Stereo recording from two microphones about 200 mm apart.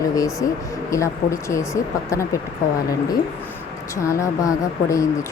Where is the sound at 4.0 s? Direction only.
15° left (ahead or behind).